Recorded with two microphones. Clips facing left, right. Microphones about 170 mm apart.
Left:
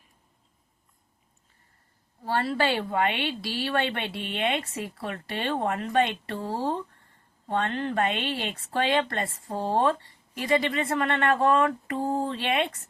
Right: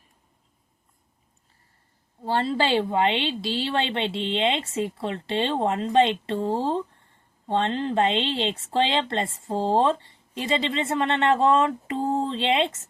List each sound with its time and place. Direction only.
2.2 s speech: 25° right (ahead or behind)